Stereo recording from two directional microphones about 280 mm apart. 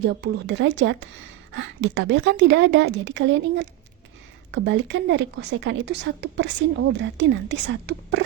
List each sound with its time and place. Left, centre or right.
0.0 s a woman's voice: right